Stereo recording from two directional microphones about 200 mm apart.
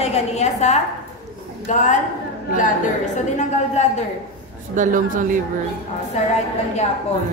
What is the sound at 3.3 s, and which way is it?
Speech, 35° left (ahead or behind).